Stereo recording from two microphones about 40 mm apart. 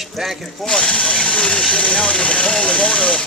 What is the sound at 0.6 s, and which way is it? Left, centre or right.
Speech, centre.